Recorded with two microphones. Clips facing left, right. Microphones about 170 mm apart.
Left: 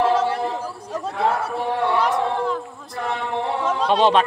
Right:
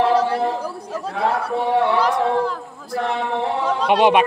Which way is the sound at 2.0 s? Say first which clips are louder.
Right 3 dB; centre (ahead or behind).